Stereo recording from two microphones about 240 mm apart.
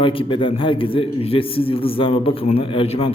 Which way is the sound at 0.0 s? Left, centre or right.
Left.